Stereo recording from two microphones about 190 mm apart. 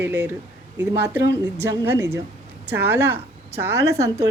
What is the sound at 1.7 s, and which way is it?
Speech, 15° right (ahead or behind).